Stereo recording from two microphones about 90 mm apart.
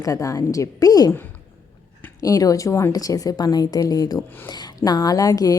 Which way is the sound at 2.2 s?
40° left (ahead or behind).